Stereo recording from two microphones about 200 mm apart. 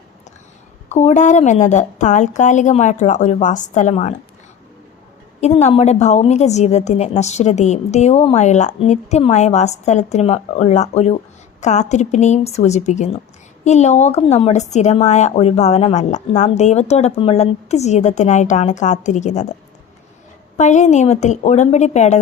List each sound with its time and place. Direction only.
0.9 s a woman's voice: 35° left (ahead or behind)
5.4 s a woman's voice: 35° left (ahead or behind)
20.6 s a woman's voice: 35° left (ahead or behind)